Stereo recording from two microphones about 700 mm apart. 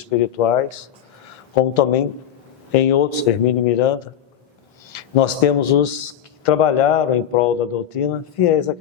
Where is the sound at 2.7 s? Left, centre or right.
Left.